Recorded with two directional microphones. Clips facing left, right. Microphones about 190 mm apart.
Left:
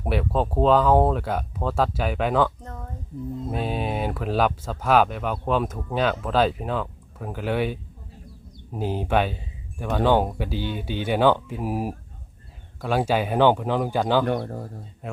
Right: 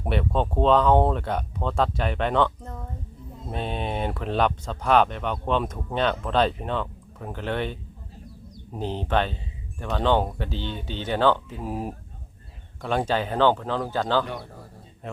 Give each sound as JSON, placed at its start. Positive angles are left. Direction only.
{"t": 0.0, "sound": "speech", "side_deg": 5}
{"t": 3.5, "sound": "speech", "side_deg": 5}
{"t": 14.3, "sound": "speech", "side_deg": 55}
{"t": 15.0, "sound": "a sound", "side_deg": 5}